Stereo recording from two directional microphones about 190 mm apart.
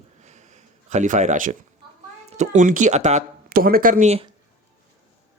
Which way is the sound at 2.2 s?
40° right (ahead or behind).